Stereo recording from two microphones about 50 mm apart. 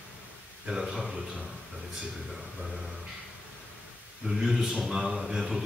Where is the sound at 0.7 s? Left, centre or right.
Centre.